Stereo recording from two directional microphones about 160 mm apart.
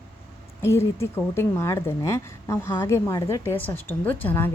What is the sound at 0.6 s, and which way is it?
Speech, 15° left (ahead or behind).